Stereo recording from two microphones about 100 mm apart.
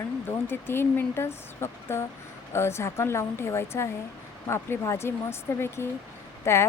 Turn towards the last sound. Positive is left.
turn(degrees=25)  # may be behind; listen again after turning